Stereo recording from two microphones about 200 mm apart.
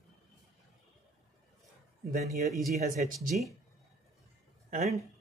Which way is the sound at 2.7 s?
35° right (ahead or behind).